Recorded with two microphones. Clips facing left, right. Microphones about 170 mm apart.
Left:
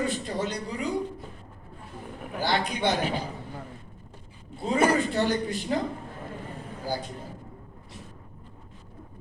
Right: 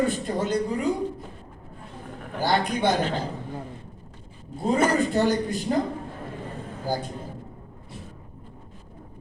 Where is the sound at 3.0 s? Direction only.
15° left (ahead or behind).